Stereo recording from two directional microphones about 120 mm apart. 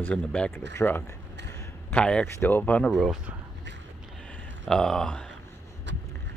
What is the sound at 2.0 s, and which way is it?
Speech, 10° left (ahead or behind).